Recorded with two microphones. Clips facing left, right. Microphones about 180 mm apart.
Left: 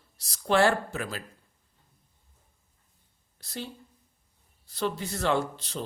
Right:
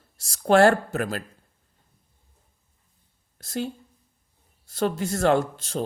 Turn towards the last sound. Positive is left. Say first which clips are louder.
# right 5 dB
turn(degrees=-45)  # may be behind; listen again after turning